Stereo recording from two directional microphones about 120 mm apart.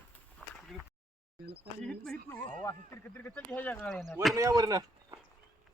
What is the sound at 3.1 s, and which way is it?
Speech, 15° left (ahead or behind).